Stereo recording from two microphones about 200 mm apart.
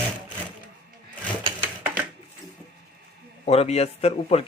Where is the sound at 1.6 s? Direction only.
10° right (ahead or behind).